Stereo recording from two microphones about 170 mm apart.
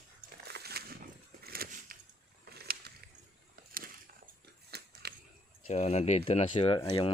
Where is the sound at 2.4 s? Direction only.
65° right (ahead or behind).